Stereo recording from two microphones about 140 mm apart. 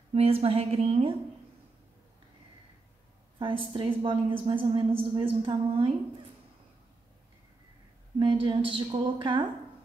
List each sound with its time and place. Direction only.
0.1 s a woman's voice: 45° right (ahead or behind)
3.3 s a woman's voice: 35° right (ahead or behind)
8.2 s a woman's voice: 40° right (ahead or behind)